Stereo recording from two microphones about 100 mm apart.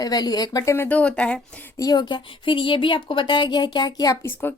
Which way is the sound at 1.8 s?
40° left (ahead or behind).